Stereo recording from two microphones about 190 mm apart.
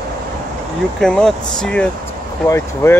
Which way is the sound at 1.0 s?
5° left (ahead or behind).